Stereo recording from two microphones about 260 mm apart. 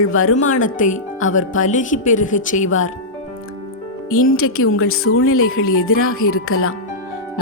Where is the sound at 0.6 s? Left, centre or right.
Left.